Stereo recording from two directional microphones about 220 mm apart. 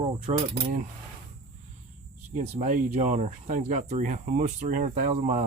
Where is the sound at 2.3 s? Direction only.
35° right (ahead or behind).